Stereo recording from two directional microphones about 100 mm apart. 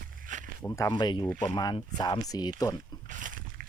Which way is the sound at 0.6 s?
30° left (ahead or behind).